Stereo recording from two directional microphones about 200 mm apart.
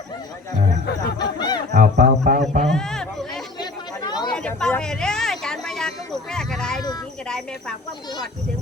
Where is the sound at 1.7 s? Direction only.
40° right (ahead or behind).